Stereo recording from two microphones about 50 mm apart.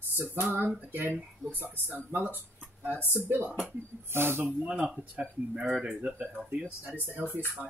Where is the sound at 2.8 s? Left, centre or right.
Left.